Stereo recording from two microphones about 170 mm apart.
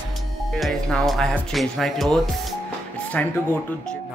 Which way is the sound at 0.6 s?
Centre (ahead or behind).